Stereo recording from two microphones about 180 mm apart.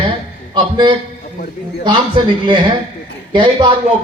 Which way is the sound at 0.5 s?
25° right (ahead or behind).